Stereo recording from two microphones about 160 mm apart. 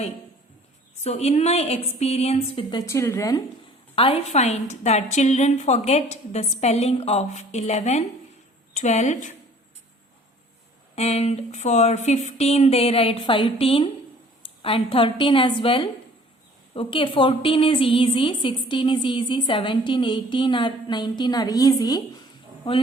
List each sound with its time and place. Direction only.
1.0 s a woman's voice: 40° left (ahead or behind)
2.8 s a woman's voice: 15° left (ahead or behind)
3.9 s a woman's voice: 35° left (ahead or behind)
10.9 s a woman's voice: 40° left (ahead or behind)